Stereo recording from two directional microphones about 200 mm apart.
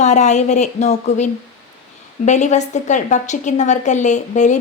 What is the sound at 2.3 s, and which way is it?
A woman's voice, 35° left (ahead or behind).